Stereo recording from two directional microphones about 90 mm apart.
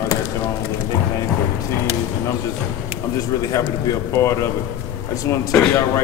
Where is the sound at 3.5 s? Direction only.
35° left (ahead or behind).